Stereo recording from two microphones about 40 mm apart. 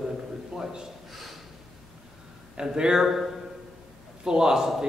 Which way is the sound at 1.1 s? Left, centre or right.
Centre.